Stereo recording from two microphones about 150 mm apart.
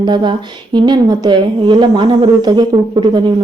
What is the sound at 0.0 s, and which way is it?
A woman's voice, 30° right (ahead or behind).